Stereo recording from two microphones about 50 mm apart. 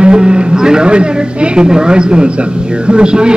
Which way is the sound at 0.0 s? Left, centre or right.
Centre.